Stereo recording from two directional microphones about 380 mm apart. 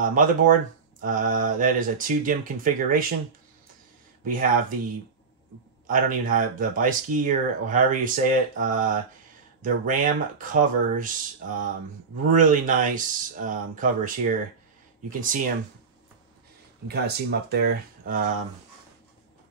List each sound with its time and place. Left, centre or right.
0.0 s speech: right
4.3 s speech: right
5.9 s speech: right
16.8 s speech: right